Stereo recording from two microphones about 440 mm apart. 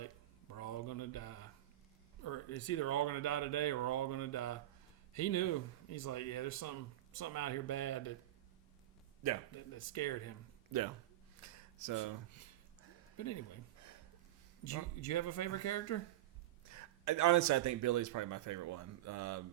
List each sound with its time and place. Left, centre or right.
0.5 s a sound: left
2.2 s speech: left
9.7 s speech: left
10.7 s speech: right
14.6 s speech: left
16.6 s a man's voice: right